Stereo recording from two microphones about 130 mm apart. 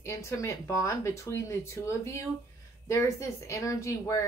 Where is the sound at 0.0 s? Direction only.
25° left (ahead or behind).